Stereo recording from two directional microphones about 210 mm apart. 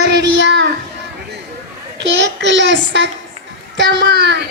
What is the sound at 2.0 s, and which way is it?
A child's voice, 55° right (ahead or behind).